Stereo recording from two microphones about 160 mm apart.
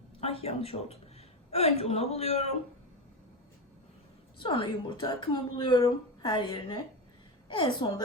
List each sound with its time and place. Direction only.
0.2 s a woman's voice: 40° left (ahead or behind)
4.4 s a woman's voice: 30° left (ahead or behind)